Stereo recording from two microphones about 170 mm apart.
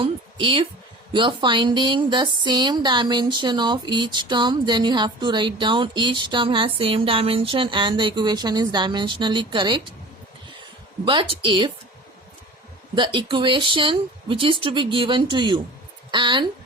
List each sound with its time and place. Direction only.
0.0 s a woman's voice: 30° right (ahead or behind)
11.0 s speech: 30° right (ahead or behind)
13.0 s speech: 30° right (ahead or behind)